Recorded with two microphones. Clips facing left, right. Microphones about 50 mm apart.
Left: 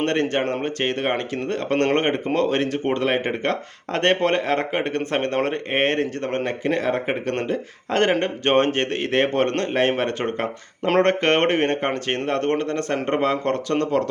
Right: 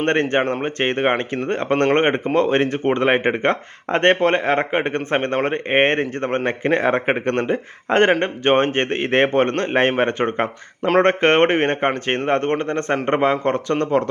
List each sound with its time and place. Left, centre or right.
0.0 s speech: right